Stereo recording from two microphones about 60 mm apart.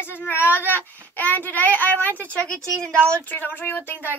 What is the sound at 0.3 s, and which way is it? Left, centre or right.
A child's voice, left.